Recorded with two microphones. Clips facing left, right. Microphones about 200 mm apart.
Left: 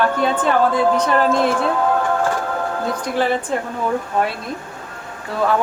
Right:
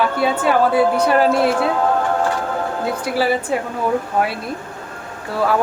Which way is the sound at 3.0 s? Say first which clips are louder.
Right 1 dB; 5° right (ahead or behind).